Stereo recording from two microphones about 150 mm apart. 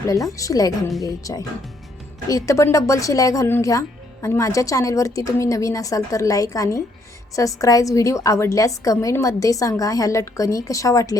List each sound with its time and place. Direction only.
0.1 s speech: 20° left (ahead or behind)